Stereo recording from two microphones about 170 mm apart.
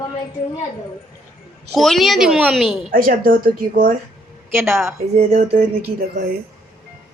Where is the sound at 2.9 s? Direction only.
55° right (ahead or behind).